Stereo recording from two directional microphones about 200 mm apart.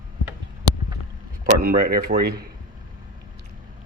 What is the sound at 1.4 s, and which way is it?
Speech, 45° right (ahead or behind).